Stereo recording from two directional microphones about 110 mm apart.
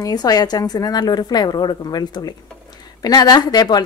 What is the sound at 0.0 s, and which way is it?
A woman's voice, 35° left (ahead or behind).